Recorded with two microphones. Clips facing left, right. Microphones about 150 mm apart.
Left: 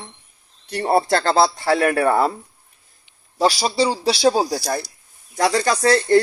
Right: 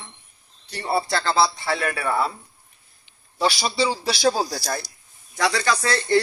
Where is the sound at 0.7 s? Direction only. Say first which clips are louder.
Left 6 dB; 55° left (ahead or behind).